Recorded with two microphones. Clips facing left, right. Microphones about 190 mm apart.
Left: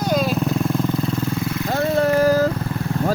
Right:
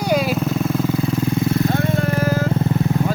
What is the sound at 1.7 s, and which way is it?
Vehicle, 40° left (ahead or behind).